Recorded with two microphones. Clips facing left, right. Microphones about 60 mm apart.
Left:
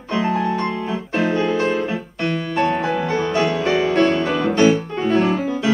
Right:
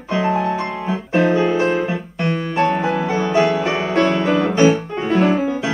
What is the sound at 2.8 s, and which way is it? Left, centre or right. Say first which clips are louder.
Music: right 1 dB; centre.